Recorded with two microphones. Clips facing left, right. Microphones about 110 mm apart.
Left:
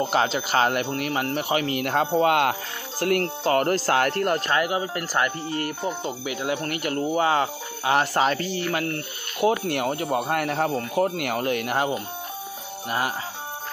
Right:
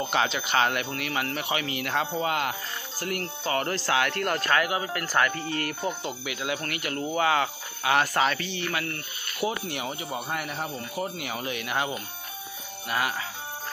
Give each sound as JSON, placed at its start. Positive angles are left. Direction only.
{"t": 0.0, "sound": "speech", "side_deg": 40}
{"t": 2.1, "sound": "speech", "side_deg": 70}
{"t": 3.5, "sound": "speech", "side_deg": 45}
{"t": 6.0, "sound": "speech", "side_deg": 40}
{"t": 9.4, "sound": "speech", "side_deg": 60}
{"t": 10.3, "sound": "speech", "side_deg": 70}
{"t": 12.8, "sound": "speech", "side_deg": 35}